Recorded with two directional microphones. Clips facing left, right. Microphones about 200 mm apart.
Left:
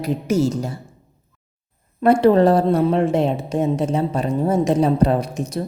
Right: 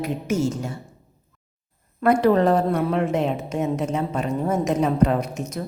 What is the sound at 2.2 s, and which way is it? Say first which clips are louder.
A woman's voice: left 5 dB; 30° left (ahead or behind).